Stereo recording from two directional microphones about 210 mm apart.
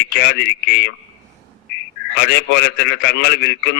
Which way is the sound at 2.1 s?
50° left (ahead or behind).